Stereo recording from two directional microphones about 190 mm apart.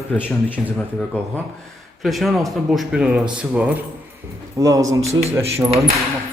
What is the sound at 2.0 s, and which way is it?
A man's voice, centre (ahead or behind).